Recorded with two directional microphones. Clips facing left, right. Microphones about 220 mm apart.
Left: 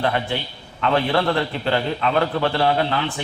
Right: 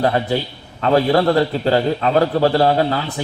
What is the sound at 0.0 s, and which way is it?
A man's voice, 40° right (ahead or behind).